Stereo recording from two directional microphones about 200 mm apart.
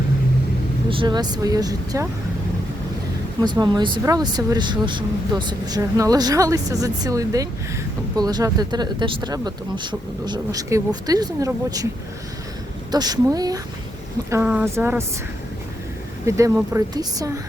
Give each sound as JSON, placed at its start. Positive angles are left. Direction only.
{"t": 0.9, "sound": "speech", "side_deg": -25}
{"t": 3.4, "sound": "speech", "side_deg": -20}
{"t": 12.9, "sound": "speech", "side_deg": -20}
{"t": 16.2, "sound": "speech", "side_deg": -15}